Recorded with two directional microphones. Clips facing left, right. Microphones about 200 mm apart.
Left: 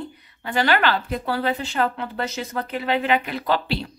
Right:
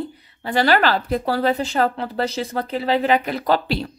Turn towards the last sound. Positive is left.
turn(degrees=-45)  # may be behind; listen again after turning